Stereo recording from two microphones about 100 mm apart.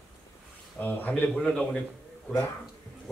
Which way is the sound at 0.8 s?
15° left (ahead or behind).